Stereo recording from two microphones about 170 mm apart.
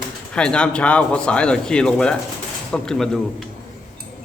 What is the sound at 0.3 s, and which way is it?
Speech, 5° left (ahead or behind).